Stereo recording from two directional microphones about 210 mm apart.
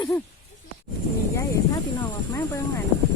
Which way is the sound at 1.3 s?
15° left (ahead or behind).